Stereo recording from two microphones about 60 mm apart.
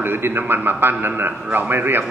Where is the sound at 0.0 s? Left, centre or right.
Right.